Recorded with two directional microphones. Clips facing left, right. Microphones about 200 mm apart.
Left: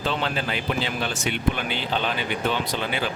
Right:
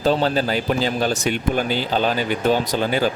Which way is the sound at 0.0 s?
40° right (ahead or behind).